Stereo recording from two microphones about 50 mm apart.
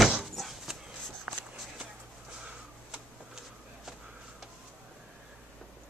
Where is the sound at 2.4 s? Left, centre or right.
Centre.